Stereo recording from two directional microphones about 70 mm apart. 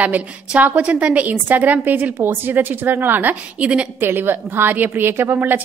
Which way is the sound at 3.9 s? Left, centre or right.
Right.